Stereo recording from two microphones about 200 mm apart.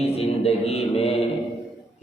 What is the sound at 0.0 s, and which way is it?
Music, 30° left (ahead or behind).